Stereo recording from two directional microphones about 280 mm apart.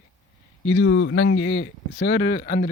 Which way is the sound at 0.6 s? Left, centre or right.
Left.